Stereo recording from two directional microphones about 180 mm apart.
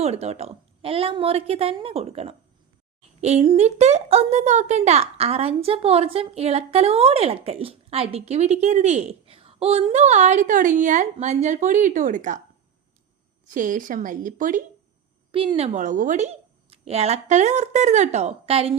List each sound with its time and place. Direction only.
0.0 s speech: 35° right (ahead or behind)
13.5 s a woman's voice: 45° right (ahead or behind)
15.3 s speech: 30° right (ahead or behind)